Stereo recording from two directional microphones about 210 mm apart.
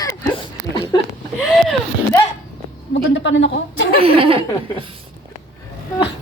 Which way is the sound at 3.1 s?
60° left (ahead or behind).